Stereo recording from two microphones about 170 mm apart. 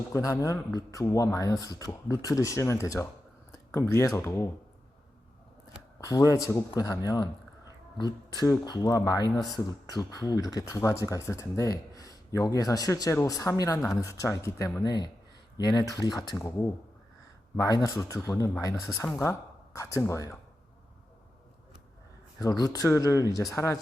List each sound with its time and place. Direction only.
0.1 s speech: 20° left (ahead or behind)
5.6 s speech: 20° left (ahead or behind)
22.4 s speech: 20° left (ahead or behind)